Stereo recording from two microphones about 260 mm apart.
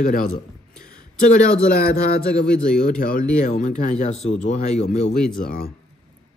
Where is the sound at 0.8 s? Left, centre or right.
Centre.